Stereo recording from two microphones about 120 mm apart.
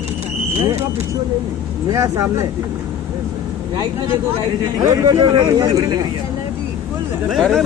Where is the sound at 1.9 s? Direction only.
25° right (ahead or behind).